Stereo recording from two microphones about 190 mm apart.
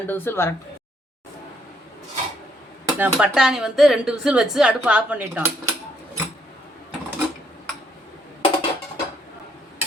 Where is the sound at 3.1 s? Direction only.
5° right (ahead or behind).